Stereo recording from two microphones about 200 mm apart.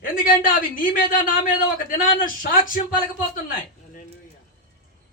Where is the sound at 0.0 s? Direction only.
45° left (ahead or behind).